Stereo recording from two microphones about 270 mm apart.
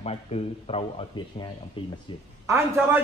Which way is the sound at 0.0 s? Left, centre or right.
Left.